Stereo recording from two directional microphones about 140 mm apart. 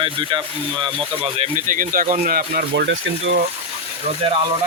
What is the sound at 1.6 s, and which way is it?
Speech, 70° right (ahead or behind).